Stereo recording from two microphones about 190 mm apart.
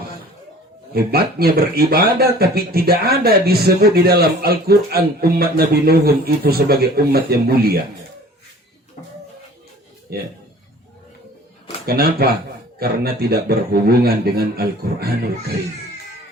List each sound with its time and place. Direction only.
0.9 s speech: 55° right (ahead or behind)
11.9 s speech: 55° right (ahead or behind)